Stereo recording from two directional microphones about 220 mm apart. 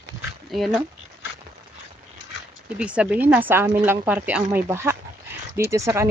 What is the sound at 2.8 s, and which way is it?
Speech, 5° right (ahead or behind).